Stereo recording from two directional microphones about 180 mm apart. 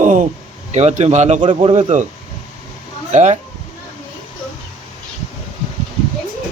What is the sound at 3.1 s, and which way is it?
Speech, 40° right (ahead or behind).